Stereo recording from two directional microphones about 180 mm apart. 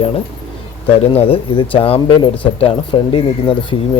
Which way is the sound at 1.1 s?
35° left (ahead or behind).